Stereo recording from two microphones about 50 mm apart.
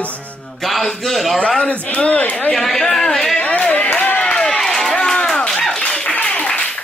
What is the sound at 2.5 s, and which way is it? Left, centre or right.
Speech, centre.